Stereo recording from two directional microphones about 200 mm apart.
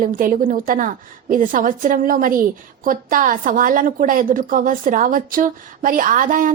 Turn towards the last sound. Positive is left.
turn(degrees=-40)  # may be behind; listen again after turning